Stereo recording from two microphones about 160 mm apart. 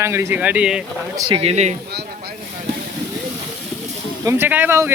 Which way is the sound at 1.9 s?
90° right.